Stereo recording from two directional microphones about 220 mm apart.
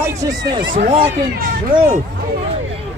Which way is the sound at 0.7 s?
35° right (ahead or behind).